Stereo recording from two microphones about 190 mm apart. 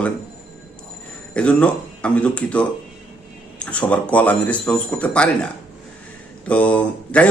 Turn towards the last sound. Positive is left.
turn(degrees=5)  # may be behind; listen again after turning